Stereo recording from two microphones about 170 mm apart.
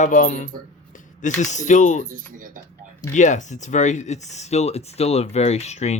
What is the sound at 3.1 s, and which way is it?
Speech, 45° left (ahead or behind).